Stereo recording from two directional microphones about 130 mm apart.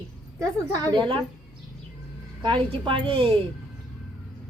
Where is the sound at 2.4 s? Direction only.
40° right (ahead or behind).